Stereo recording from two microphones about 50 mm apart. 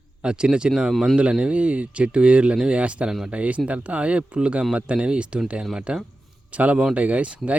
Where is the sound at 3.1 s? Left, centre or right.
Centre.